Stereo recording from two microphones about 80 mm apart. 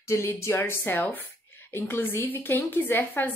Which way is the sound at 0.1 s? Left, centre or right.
Left.